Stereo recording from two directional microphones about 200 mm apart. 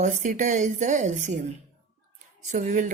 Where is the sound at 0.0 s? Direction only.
35° right (ahead or behind).